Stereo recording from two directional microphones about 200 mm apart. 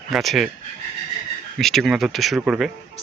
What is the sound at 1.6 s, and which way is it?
Speech, centre (ahead or behind).